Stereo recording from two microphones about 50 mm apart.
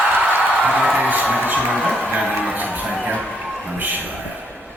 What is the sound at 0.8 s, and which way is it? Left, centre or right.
Speech, right.